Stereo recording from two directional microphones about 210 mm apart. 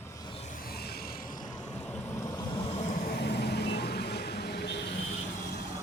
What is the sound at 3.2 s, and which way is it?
Vehicle, 50° left (ahead or behind).